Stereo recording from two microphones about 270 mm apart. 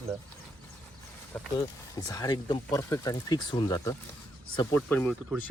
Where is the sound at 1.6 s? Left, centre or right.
Centre.